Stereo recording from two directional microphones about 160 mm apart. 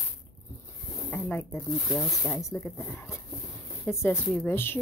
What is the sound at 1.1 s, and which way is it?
Speech, 15° left (ahead or behind).